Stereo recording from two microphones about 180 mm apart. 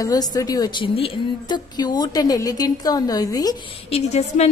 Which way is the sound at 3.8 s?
35° left (ahead or behind).